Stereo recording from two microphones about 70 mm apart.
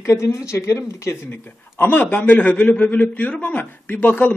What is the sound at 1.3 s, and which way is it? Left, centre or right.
A man's voice, left.